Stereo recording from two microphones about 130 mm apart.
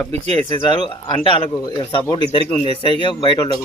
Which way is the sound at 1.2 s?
40° left (ahead or behind).